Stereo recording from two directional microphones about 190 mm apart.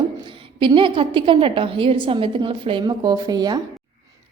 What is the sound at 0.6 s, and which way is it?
A woman's voice, 25° right (ahead or behind).